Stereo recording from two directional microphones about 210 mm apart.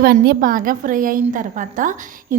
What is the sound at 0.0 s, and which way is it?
A woman's voice, 45° right (ahead or behind).